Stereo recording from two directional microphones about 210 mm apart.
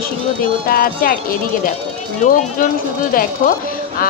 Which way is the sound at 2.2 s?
40° left (ahead or behind).